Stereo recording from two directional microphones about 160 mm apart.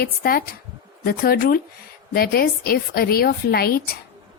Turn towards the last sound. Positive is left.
turn(degrees=70)  # may be behind; listen again after turning